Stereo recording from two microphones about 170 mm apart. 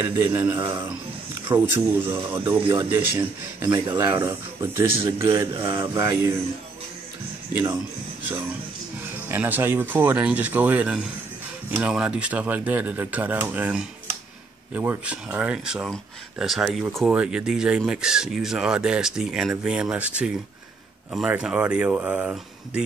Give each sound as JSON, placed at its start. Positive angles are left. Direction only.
{"t": 0.0, "sound": "a man's voice", "side_deg": -15}
{"t": 7.5, "sound": "a man's voice", "side_deg": -15}
{"t": 9.3, "sound": "a man's voice", "side_deg": -10}